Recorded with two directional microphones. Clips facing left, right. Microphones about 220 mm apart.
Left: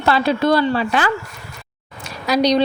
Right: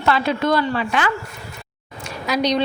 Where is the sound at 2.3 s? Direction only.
35° left (ahead or behind).